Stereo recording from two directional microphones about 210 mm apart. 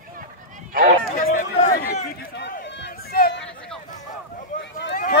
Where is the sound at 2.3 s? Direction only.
55° left (ahead or behind).